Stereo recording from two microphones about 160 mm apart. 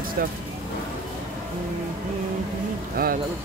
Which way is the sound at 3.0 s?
65° right (ahead or behind).